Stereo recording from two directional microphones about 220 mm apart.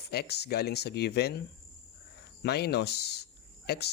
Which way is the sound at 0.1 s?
50° left (ahead or behind).